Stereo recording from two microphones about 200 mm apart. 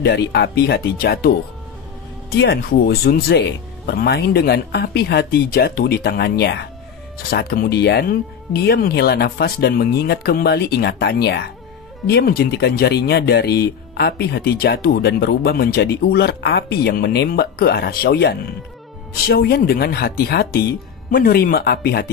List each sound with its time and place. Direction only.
0.0 s speech: 55° left (ahead or behind)
2.3 s speech: 50° left (ahead or behind)